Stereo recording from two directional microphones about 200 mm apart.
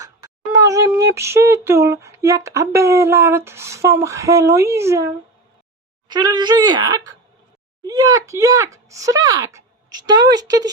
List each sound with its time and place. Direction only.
0.0 s a woman's voice: 15° right (ahead or behind)